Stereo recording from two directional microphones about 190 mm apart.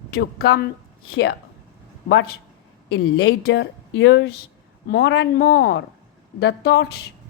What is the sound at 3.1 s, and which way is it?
Speech, 60° left (ahead or behind).